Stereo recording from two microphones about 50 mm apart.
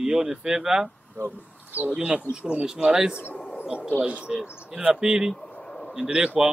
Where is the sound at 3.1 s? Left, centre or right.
Left.